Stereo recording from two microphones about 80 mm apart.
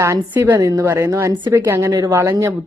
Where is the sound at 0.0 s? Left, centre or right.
Right.